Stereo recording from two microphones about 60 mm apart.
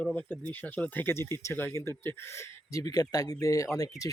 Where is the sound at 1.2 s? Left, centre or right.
Left.